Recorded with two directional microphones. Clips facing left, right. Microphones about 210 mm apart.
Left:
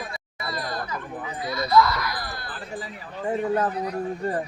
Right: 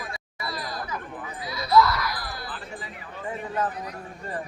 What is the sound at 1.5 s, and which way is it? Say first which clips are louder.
Speech: even; 5° right (ahead or behind).